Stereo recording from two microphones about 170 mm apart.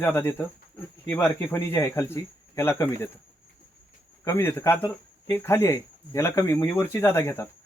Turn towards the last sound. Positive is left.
turn(degrees=15)  # may be behind; listen again after turning